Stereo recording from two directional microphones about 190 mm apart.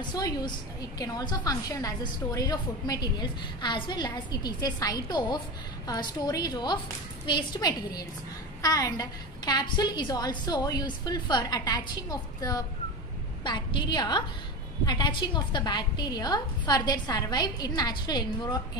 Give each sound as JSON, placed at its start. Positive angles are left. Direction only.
{"t": 0.0, "sound": "a woman's voice", "side_deg": 20}